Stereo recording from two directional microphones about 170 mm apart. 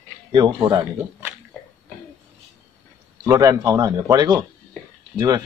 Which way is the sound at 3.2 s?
20° right (ahead or behind).